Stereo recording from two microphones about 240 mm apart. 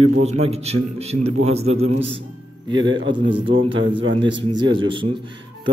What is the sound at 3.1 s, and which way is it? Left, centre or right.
Speech, right.